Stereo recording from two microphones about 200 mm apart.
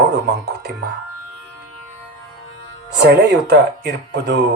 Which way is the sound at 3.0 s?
55° right (ahead or behind).